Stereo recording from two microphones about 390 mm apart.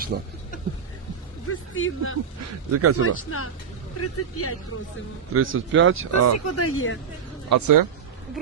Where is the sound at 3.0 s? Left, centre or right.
Left.